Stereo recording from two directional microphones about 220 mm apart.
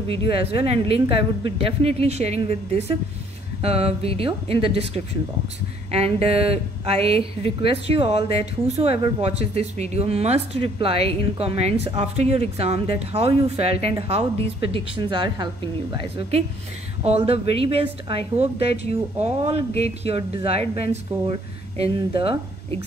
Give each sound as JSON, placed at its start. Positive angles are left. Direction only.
{"t": 0.3, "sound": "speech", "side_deg": -25}